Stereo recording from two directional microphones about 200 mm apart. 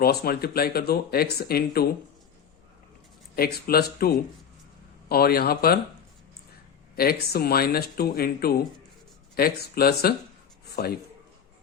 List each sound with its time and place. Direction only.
0.0 s speech: 50° left (ahead or behind)
3.3 s speech: 50° left (ahead or behind)
6.9 s speech: 50° left (ahead or behind)